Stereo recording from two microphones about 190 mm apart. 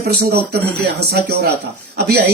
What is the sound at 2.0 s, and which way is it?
Speech, 60° right (ahead or behind).